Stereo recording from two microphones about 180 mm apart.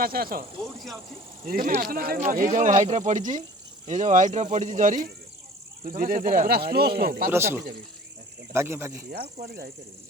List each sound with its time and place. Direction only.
0.0 s speech: 55° right (ahead or behind)
1.5 s speech: 50° right (ahead or behind)
6.0 s speech: 50° right (ahead or behind)
8.5 s speech: 15° right (ahead or behind)
9.0 s speech: 55° right (ahead or behind)